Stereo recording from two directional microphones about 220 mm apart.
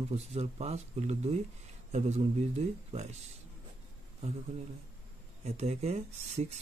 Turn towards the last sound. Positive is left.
turn(degrees=-30)  # may be behind; listen again after turning